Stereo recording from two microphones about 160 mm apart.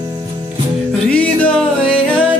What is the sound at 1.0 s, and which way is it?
Music, 10° left (ahead or behind).